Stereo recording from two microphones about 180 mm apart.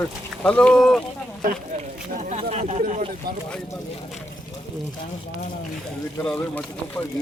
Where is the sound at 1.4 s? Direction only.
45° right (ahead or behind).